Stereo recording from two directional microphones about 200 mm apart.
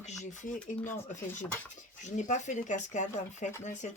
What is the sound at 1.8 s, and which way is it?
Speech, 40° left (ahead or behind).